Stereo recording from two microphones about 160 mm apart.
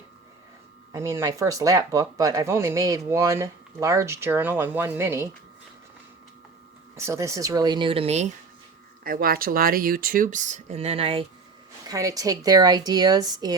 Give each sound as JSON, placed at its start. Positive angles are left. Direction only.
{"t": 0.9, "sound": "speech", "side_deg": -20}
{"t": 6.9, "sound": "speech", "side_deg": -20}
{"t": 9.0, "sound": "speech", "side_deg": -65}
{"t": 11.9, "sound": "speech", "side_deg": -20}